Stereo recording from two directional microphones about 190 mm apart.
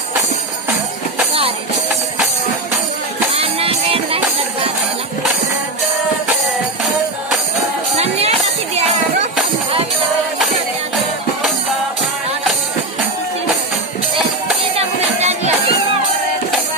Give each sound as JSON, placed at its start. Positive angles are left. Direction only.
{"t": 1.3, "sound": "music", "side_deg": -30}
{"t": 3.3, "sound": "music", "side_deg": -30}
{"t": 7.9, "sound": "music", "side_deg": -35}
{"t": 14.8, "sound": "music", "side_deg": -35}